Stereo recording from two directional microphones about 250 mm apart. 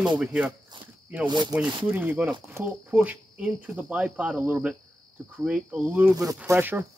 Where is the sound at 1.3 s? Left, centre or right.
Centre.